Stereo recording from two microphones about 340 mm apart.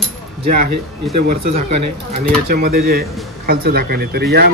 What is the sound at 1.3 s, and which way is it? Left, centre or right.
Speech, centre.